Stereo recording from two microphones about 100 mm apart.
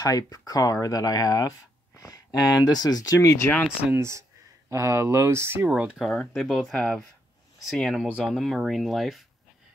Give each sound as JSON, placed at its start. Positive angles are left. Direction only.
{"t": 0.0, "sound": "speech", "side_deg": 40}
{"t": 3.9, "sound": "speech", "side_deg": -25}
{"t": 5.7, "sound": "speech", "side_deg": -10}
{"t": 6.0, "sound": "speech", "side_deg": 5}